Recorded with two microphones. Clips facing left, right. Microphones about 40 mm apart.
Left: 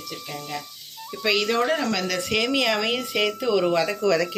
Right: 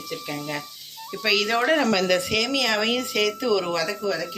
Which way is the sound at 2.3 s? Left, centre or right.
Centre.